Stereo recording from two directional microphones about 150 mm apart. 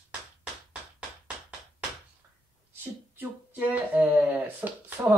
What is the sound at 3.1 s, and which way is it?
Speech, 10° right (ahead or behind).